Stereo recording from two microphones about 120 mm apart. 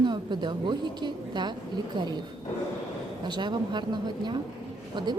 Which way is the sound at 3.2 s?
40° right (ahead or behind).